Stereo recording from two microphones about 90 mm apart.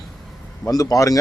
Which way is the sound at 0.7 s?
45° left (ahead or behind).